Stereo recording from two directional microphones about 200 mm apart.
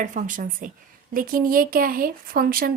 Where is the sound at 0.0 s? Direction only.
40° right (ahead or behind).